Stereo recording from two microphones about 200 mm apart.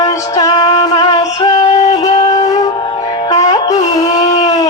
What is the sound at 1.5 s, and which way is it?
Music, 35° left (ahead or behind).